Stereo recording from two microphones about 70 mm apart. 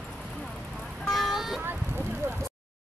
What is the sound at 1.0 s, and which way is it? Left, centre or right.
Vehicle, centre.